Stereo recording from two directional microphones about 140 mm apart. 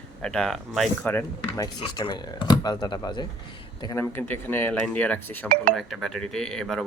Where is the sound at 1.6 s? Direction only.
35° left (ahead or behind).